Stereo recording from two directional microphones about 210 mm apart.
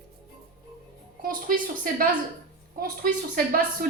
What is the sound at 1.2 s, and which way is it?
A woman's voice, 40° right (ahead or behind).